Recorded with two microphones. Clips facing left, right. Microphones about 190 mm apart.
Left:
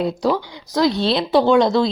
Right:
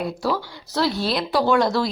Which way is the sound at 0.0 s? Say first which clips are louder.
Left 5 dB; 20° left (ahead or behind).